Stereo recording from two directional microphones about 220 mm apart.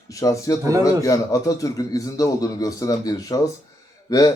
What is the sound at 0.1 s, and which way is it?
Speech, 15° left (ahead or behind).